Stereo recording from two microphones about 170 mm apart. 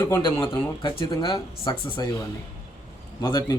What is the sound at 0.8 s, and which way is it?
Speech, 30° left (ahead or behind).